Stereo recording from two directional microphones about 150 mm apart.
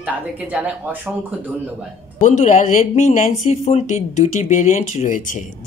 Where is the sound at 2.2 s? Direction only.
55° left (ahead or behind).